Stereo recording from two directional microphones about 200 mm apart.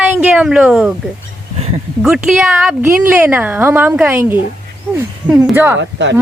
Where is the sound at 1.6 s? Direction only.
30° right (ahead or behind).